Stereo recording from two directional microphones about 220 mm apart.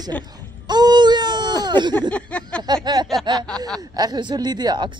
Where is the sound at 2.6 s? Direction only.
20° right (ahead or behind).